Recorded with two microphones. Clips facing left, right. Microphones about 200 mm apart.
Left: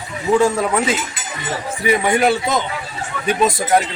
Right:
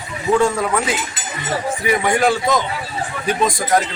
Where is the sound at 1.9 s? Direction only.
25° left (ahead or behind).